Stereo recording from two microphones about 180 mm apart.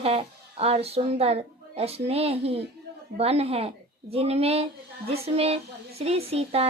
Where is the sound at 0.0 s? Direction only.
30° right (ahead or behind).